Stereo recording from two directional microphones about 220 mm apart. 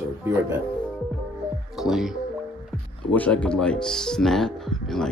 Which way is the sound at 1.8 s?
Centre (ahead or behind).